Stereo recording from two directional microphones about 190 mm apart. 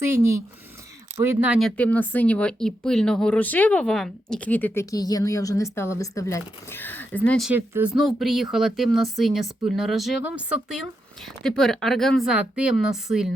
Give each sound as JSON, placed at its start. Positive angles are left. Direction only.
{"t": 0.0, "sound": "speech", "side_deg": -15}
{"t": 7.5, "sound": "speech", "side_deg": -10}